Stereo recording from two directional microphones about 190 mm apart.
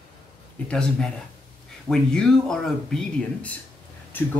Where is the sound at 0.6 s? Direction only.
5° left (ahead or behind).